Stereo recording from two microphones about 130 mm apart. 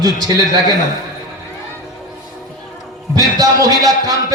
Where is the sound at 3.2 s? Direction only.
30° right (ahead or behind).